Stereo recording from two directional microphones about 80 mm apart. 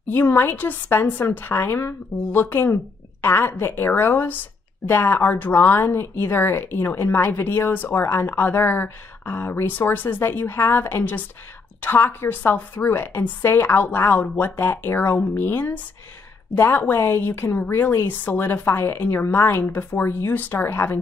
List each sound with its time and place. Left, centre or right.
0.1 s speech: left